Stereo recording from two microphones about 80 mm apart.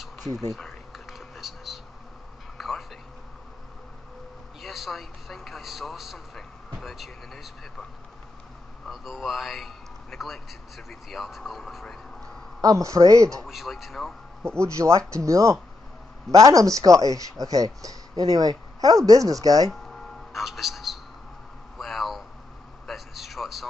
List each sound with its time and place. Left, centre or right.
0.3 s speech: right
0.6 s a sound: centre
4.6 s a man's voice: centre
8.8 s a man's voice: centre
12.6 s speech: right
13.5 s speech: centre
14.4 s speech: right
19.7 s a sound: centre